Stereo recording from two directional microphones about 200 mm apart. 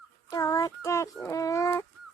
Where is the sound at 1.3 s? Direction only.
15° left (ahead or behind).